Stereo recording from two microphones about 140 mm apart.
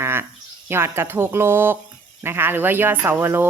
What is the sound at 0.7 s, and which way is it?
Speech, 15° right (ahead or behind).